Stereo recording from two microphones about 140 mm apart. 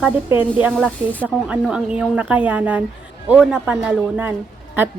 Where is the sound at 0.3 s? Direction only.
10° right (ahead or behind).